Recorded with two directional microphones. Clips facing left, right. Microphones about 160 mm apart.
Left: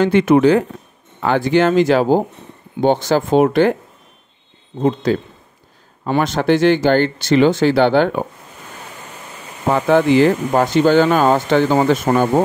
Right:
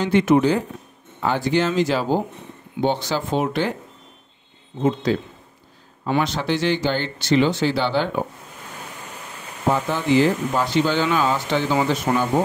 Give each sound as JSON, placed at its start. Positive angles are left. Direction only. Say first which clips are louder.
{"t": 0.0, "sound": "speech", "louder": "left 5 dB", "side_deg": 55}
{"t": 4.8, "sound": "speech", "louder": "left 4 dB", "side_deg": 45}
{"t": 9.7, "sound": "speech", "louder": "left 7 dB", "side_deg": 65}